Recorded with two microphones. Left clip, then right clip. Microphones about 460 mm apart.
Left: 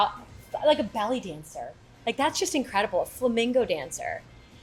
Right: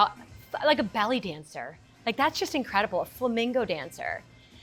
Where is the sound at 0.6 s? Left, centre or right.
Right.